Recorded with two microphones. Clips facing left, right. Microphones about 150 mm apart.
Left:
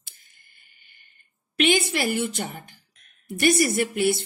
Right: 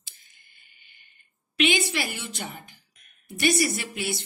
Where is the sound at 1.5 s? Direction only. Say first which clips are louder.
Left 3 dB; 50° left (ahead or behind).